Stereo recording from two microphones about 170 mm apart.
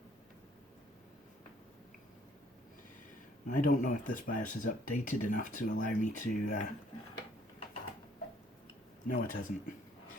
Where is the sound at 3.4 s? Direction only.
50° left (ahead or behind).